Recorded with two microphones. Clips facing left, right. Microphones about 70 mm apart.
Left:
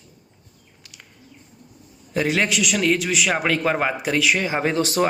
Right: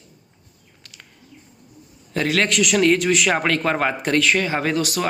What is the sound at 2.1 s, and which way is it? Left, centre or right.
Speech, centre.